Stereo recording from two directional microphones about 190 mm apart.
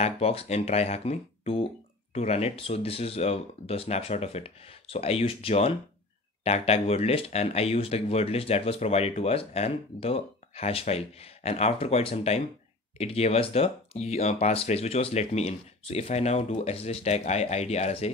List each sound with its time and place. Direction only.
0.0 s speech: 30° left (ahead or behind)